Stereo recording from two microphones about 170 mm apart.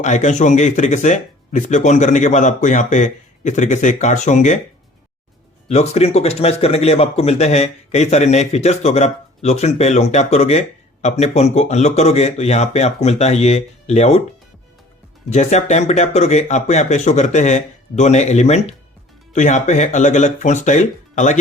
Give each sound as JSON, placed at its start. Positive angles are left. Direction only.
{"t": 0.0, "sound": "speech", "side_deg": 45}
{"t": 5.6, "sound": "speech", "side_deg": 40}
{"t": 15.3, "sound": "speech", "side_deg": 40}